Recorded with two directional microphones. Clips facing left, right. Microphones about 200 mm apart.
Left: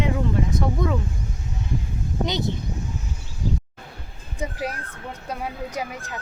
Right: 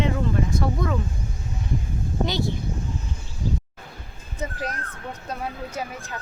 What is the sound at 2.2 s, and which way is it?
Speech, 20° left (ahead or behind).